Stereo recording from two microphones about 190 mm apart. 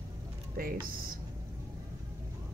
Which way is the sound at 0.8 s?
50° right (ahead or behind).